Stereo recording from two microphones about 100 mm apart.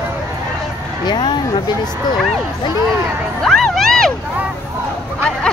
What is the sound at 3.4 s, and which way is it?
Crowd, 5° left (ahead or behind).